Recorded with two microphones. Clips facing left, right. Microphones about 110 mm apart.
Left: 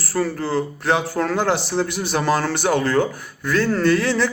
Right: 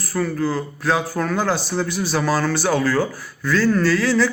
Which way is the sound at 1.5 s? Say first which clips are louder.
Left 1 dB; 70° left (ahead or behind).